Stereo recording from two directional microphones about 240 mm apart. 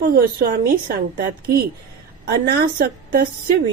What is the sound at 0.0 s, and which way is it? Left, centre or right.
A woman's voice, right.